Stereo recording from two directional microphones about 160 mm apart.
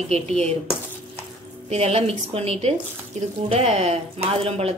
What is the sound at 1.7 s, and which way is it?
Speech, 40° right (ahead or behind).